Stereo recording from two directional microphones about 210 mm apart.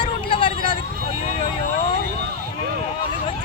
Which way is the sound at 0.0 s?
25° left (ahead or behind).